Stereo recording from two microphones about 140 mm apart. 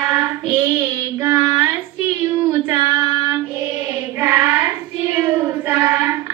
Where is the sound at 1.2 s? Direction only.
20° right (ahead or behind).